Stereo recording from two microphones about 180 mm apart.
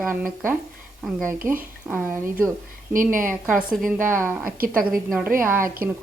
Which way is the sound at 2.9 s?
50° right (ahead or behind).